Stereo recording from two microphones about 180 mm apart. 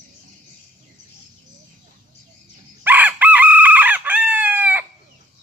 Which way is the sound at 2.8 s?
10° right (ahead or behind).